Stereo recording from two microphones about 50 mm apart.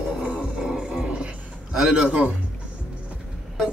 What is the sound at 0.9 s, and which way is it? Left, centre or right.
Dog, centre.